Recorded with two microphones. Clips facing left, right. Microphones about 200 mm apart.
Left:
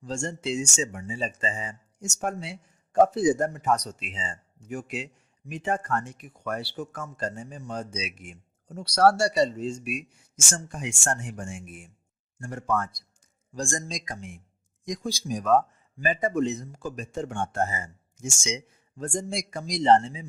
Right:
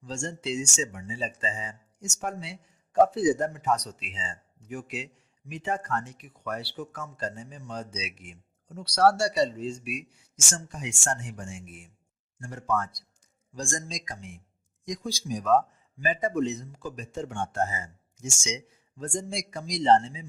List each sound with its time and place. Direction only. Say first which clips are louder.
0.0 s speech: left 3 dB; 50° left (ahead or behind)